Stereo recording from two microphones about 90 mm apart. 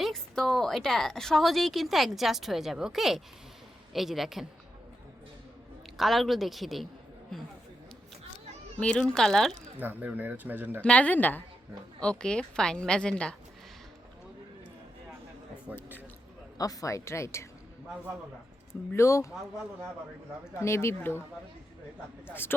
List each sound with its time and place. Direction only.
0.0 s a woman's voice: 5° left (ahead or behind)
6.0 s a woman's voice: centre (ahead or behind)
8.8 s a woman's voice: 10° left (ahead or behind)
9.7 s speech: 20° right (ahead or behind)
10.8 s a woman's voice: 15° left (ahead or behind)
15.7 s speech: 20° right (ahead or behind)
16.6 s a woman's voice: 40° left (ahead or behind)
18.9 s a woman's voice: 35° left (ahead or behind)
20.6 s speech: 30° left (ahead or behind)
22.3 s speech: 25° left (ahead or behind)